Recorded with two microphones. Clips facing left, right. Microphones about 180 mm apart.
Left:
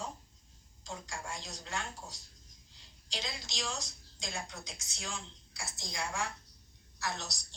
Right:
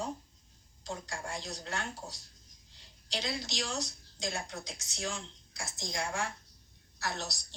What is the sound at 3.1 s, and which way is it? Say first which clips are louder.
A woman's voice: right 6 dB; 60° right (ahead or behind).